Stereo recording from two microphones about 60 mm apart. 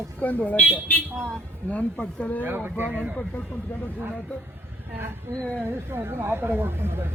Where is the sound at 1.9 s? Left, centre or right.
Left.